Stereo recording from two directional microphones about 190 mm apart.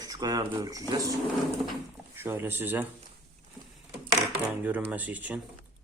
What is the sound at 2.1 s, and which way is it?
Speech, 10° right (ahead or behind).